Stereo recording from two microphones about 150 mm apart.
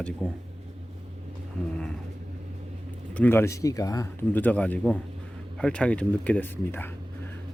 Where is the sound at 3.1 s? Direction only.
10° left (ahead or behind).